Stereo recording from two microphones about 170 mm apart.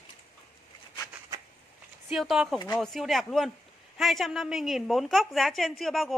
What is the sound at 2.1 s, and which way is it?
Speech, centre (ahead or behind).